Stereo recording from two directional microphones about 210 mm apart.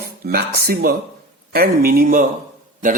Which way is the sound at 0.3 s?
50° right (ahead or behind).